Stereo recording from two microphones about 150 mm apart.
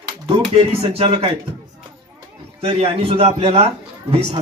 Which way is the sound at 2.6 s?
40° right (ahead or behind).